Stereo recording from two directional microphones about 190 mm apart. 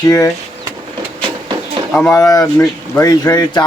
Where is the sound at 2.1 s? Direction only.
15° left (ahead or behind).